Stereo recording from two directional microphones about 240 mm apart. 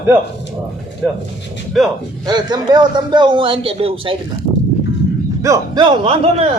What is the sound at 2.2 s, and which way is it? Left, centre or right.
A man's voice, centre.